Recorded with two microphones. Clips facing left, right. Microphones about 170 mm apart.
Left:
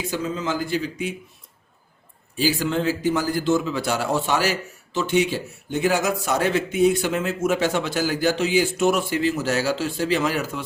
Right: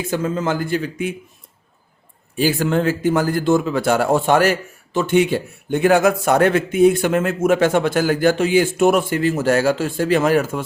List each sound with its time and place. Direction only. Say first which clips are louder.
0.1 s speech: right 6 dB; 50° right (ahead or behind)
2.4 s speech: right 4 dB; 50° right (ahead or behind)